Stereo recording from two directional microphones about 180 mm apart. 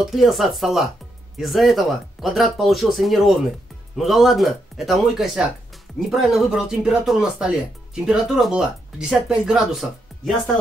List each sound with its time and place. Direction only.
0.0 s speech: centre (ahead or behind)